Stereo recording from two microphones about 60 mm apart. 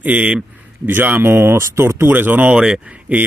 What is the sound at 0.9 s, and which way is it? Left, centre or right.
Speech, right.